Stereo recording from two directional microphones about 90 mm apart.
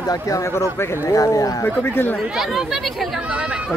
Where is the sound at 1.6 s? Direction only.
25° left (ahead or behind).